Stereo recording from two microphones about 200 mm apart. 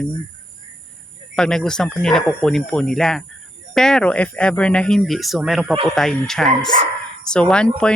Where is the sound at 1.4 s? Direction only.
5° left (ahead or behind).